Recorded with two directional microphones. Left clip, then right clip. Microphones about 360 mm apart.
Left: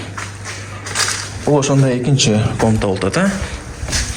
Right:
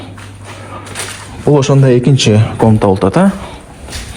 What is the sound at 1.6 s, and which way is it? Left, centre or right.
A man's voice, centre.